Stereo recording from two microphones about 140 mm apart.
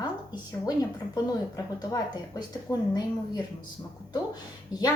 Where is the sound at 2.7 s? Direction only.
15° left (ahead or behind).